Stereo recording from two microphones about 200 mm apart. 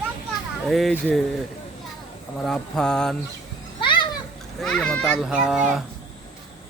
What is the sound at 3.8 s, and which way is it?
Children playing, 25° left (ahead or behind).